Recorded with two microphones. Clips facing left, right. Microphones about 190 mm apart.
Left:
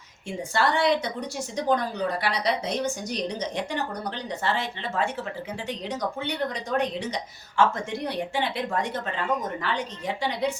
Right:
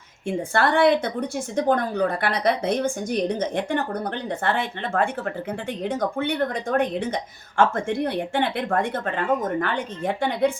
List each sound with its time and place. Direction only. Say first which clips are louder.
0.3 s a woman's voice: right 4 dB; 55° right (ahead or behind)